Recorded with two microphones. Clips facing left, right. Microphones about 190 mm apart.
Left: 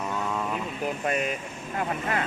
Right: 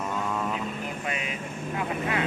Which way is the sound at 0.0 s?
Centre (ahead or behind).